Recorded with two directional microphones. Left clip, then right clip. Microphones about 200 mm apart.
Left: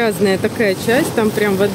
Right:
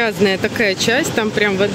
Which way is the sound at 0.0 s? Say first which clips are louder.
Even; centre (ahead or behind).